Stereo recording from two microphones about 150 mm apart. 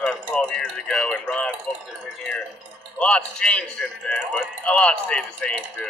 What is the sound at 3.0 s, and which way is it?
A man's voice, 5° left (ahead or behind).